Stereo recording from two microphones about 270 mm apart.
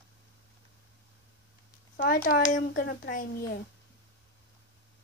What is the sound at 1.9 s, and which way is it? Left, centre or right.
A child's voice, left.